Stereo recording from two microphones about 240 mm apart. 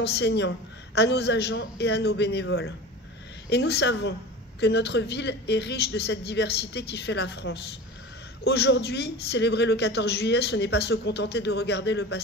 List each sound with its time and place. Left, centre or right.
0.0 s a man's voice: left
3.4 s a man's voice: left